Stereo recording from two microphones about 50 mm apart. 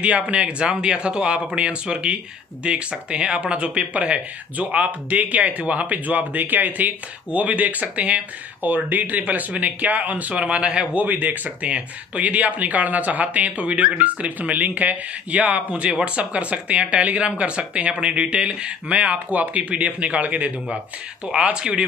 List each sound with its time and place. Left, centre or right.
0.0 s speech: right
8.6 s speech: right
10.4 s speech: right